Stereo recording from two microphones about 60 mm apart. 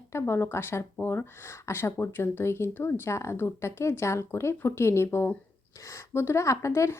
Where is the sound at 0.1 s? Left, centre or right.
Left.